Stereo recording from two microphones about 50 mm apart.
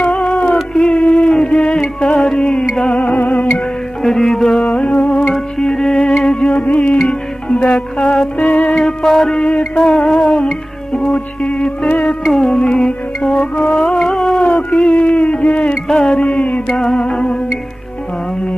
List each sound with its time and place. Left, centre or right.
0.0 s a sound: left
0.7 s a sound: centre
2.0 s music: centre
3.0 s music: left
4.0 s music: centre
4.7 s music: left
5.3 s music: centre
6.5 s music: left
8.7 s music: centre
9.3 s music: centre
12.2 s music: centre
14.2 s a sound: centre